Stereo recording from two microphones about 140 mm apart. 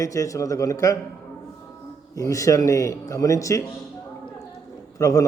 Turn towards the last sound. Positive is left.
turn(degrees=25)  # may be behind; listen again after turning